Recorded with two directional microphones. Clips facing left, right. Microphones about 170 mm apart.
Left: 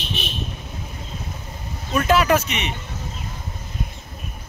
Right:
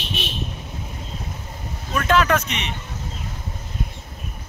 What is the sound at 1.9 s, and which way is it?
Speech, 10° left (ahead or behind).